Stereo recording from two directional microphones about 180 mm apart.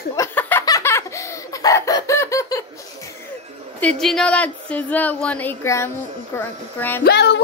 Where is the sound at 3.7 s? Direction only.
5° left (ahead or behind).